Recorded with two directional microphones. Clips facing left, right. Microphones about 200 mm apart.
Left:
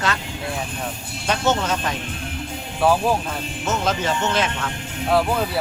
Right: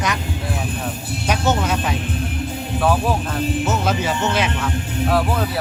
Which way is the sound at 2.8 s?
Centre (ahead or behind).